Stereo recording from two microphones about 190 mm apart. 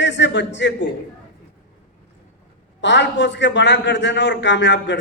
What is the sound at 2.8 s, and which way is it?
A man's voice, 70° left (ahead or behind).